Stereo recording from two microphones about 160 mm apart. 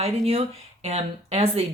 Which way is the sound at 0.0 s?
40° right (ahead or behind).